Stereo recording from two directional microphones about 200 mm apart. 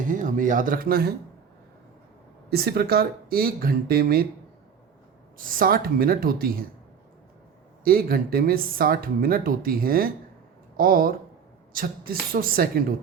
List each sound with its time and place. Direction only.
0.0 s speech: 40° right (ahead or behind)
2.5 s speech: 50° right (ahead or behind)
5.4 s speech: 45° right (ahead or behind)
7.9 s speech: 50° right (ahead or behind)